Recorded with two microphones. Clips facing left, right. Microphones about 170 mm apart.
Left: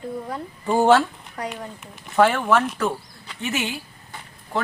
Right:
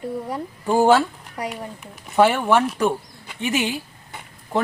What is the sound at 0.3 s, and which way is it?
Speech, 5° right (ahead or behind).